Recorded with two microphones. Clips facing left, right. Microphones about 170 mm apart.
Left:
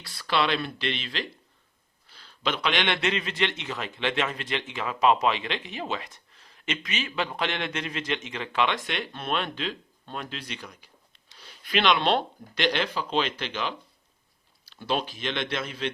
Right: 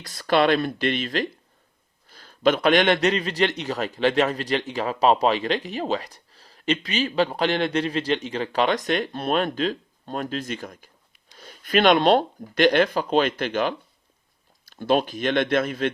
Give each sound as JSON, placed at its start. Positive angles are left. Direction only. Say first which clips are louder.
{"t": 0.0, "sound": "a man's voice", "louder": "right 7 dB", "side_deg": -45}